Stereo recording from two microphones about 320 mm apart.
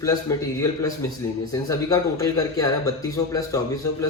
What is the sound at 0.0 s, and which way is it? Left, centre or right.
Speech, centre.